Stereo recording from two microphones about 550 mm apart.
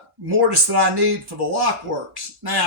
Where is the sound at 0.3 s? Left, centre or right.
Right.